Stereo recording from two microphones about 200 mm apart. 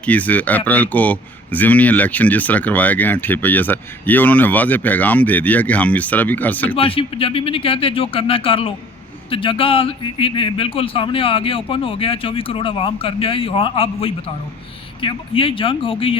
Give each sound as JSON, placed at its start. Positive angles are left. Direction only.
{"t": 0.0, "sound": "speech", "side_deg": 5}
{"t": 6.7, "sound": "a man's voice", "side_deg": 25}